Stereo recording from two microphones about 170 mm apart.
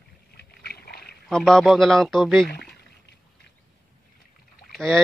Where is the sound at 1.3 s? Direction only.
5° left (ahead or behind).